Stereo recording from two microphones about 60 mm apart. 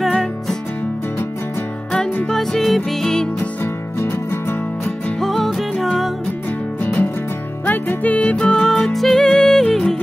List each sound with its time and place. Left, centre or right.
0.0 s music: centre
2.2 s music: centre
4.0 s music: left
5.2 s music: centre
7.6 s music: left; by 9.9 s centre